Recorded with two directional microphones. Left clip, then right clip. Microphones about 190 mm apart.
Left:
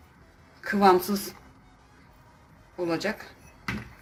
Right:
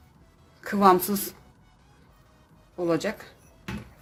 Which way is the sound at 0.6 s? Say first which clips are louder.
Right 1 dB; 60° right (ahead or behind).